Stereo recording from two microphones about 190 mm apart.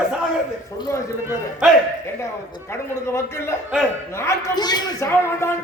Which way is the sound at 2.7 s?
15° left (ahead or behind).